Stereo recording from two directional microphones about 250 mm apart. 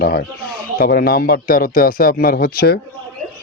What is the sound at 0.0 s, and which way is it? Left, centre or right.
Speech, left.